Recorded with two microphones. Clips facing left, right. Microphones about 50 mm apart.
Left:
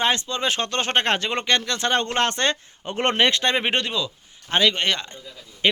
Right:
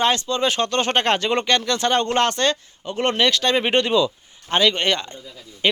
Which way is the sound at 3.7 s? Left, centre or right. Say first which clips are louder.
Right 7 dB; centre.